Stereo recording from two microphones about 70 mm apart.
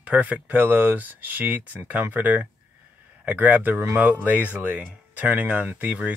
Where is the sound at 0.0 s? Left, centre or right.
Centre.